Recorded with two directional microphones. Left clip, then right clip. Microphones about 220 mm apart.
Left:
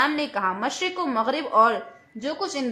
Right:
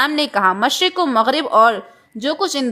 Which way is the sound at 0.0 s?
40° right (ahead or behind).